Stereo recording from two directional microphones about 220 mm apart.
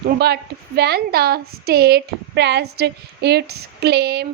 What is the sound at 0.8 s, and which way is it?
Speech, 45° right (ahead or behind).